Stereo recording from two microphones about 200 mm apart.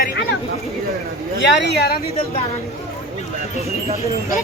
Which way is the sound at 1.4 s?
60° left (ahead or behind).